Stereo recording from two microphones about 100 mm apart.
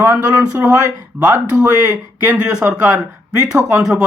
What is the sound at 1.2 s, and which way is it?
Speech, 15° right (ahead or behind).